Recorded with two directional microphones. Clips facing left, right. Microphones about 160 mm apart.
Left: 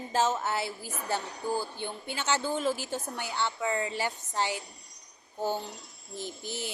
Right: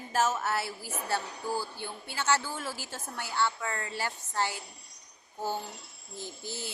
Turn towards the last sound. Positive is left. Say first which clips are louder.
# left 3 dB
turn(degrees=20)  # may be behind; listen again after turning